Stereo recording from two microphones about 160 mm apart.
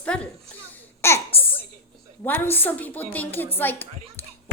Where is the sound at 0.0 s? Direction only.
5° left (ahead or behind).